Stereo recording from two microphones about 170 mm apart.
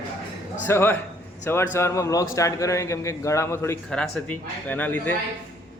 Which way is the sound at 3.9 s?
5° left (ahead or behind).